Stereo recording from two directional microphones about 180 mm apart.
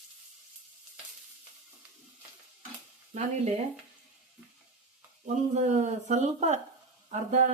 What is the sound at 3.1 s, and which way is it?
Speech, 40° right (ahead or behind).